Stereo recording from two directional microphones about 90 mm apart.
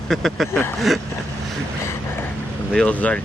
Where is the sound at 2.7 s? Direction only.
15° left (ahead or behind).